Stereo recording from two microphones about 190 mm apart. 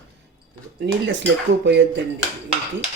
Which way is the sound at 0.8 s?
70° right (ahead or behind).